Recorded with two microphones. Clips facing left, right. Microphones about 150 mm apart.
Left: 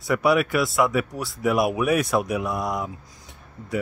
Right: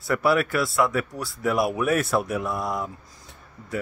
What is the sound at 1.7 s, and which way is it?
Speech, 15° left (ahead or behind).